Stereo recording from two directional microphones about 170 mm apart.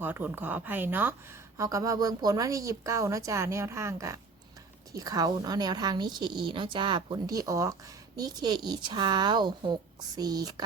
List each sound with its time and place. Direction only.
0.0 s a woman's voice: 10° right (ahead or behind)